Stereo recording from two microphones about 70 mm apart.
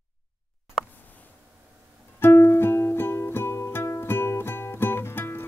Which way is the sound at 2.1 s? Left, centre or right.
Left.